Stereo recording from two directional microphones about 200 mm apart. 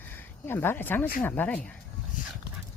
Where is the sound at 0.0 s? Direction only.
10° left (ahead or behind).